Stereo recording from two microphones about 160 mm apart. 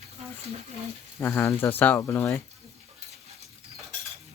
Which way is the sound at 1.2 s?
15° left (ahead or behind).